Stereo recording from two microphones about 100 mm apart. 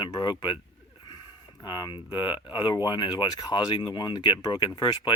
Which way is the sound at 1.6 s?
50° left (ahead or behind).